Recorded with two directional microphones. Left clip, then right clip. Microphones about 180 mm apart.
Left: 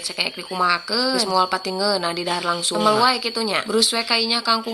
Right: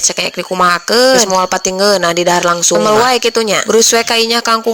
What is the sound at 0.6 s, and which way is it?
Speech, 45° right (ahead or behind).